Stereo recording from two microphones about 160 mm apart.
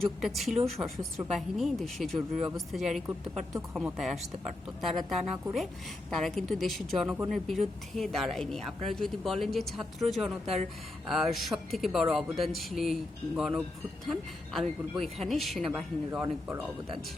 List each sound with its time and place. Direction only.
0.2 s a woman's voice: centre (ahead or behind)
0.8 s speech: 15° right (ahead or behind)
1.3 s a woman's voice: centre (ahead or behind)
16.2 s speech: 15° right (ahead or behind)